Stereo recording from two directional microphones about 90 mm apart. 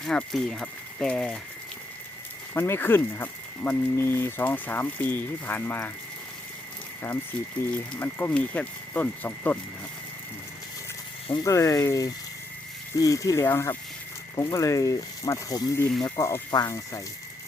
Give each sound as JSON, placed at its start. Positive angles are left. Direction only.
{"t": 0.0, "sound": "speech", "side_deg": 5}
{"t": 2.5, "sound": "speech", "side_deg": 25}
{"t": 7.7, "sound": "speech", "side_deg": 20}
{"t": 11.4, "sound": "speech", "side_deg": 35}